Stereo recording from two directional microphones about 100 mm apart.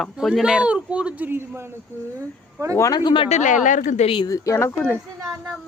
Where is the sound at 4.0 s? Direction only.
65° left (ahead or behind).